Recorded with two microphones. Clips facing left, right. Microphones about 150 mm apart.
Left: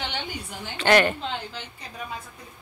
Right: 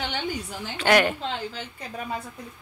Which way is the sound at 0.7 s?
10° right (ahead or behind).